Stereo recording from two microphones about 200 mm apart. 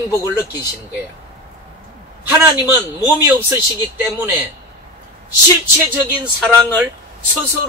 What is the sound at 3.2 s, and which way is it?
Speech, 15° right (ahead or behind).